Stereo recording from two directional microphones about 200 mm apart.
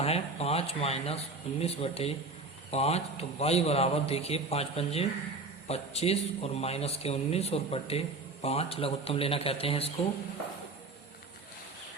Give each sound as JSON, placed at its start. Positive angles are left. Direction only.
{"t": 0.0, "sound": "speech", "side_deg": 30}